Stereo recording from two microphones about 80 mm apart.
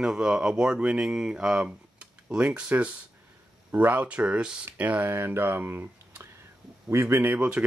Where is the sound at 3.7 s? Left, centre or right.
Right.